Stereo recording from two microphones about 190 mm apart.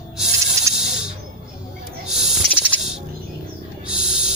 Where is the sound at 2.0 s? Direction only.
Centre (ahead or behind).